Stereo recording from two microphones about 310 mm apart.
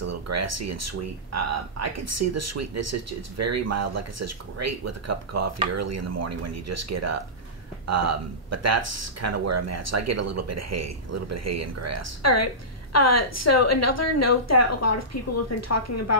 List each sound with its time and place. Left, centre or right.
0.0 s speech: right
12.2 s a woman's voice: left